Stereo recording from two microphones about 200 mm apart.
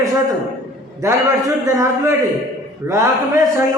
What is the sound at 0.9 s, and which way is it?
A man's voice, 15° right (ahead or behind).